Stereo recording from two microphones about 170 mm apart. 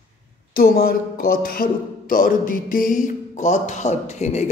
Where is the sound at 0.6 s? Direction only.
65° left (ahead or behind).